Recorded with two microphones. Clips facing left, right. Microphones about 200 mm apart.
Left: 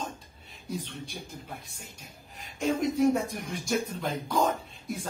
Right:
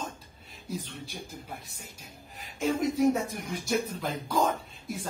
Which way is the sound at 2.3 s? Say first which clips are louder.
Even; centre (ahead or behind).